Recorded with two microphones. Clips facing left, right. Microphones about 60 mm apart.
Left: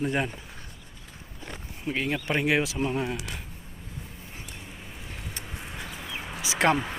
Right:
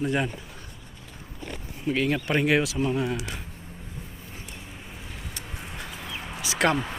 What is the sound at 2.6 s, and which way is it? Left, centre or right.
Speech, left.